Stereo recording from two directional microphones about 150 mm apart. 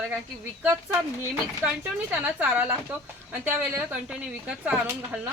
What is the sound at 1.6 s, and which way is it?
A woman's voice, 10° right (ahead or behind).